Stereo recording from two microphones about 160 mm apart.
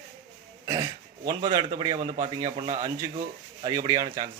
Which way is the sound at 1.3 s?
25° right (ahead or behind).